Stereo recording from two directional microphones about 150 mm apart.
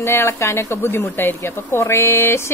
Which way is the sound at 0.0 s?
15° left (ahead or behind).